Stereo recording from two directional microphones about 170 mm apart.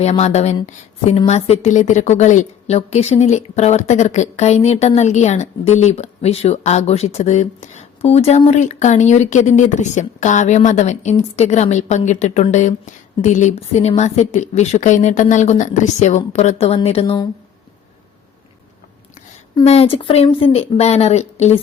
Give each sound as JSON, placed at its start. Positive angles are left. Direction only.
{"t": 0.0, "sound": "a woman's voice", "side_deg": 40}
{"t": 19.6, "sound": "speech", "side_deg": 35}